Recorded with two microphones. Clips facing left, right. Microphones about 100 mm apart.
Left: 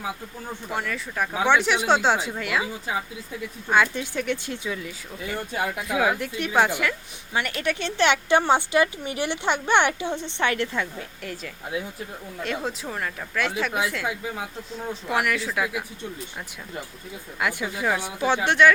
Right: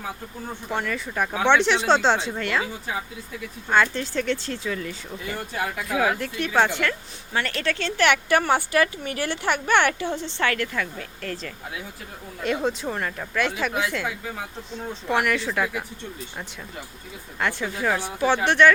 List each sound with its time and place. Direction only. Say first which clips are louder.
0.7 s speech: right 2 dB; centre (ahead or behind)
1.3 s a woman's voice: right 1 dB; 10° left (ahead or behind)
12.4 s speech: right 5 dB; centre (ahead or behind)
15.0 s speech: right 2 dB; centre (ahead or behind)
17.4 s speech: right 1 dB; 5° left (ahead or behind)